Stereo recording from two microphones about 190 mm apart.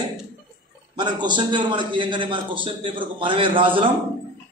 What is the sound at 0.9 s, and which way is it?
A man's voice, 25° right (ahead or behind).